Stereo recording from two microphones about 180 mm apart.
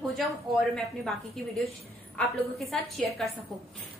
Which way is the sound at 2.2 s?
Centre (ahead or behind).